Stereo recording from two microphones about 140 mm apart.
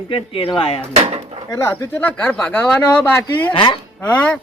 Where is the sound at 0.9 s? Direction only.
45° right (ahead or behind).